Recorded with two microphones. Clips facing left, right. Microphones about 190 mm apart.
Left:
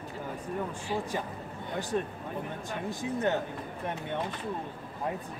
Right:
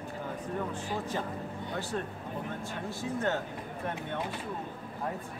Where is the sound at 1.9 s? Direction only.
15° left (ahead or behind).